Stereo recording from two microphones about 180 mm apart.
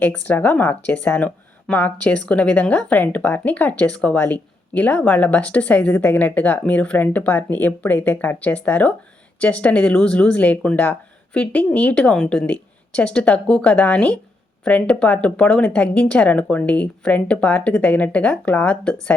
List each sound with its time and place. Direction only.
0.0 s speech: 10° left (ahead or behind)